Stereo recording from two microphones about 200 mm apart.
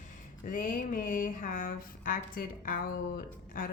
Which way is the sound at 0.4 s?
40° left (ahead or behind).